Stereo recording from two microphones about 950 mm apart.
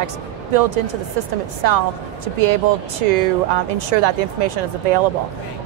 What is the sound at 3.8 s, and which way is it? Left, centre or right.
A woman's voice, right.